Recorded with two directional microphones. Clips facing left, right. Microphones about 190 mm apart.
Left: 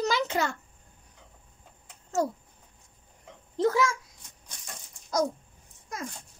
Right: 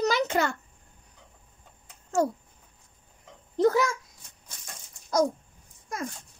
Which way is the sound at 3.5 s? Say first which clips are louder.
Right 2 dB; 40° right (ahead or behind).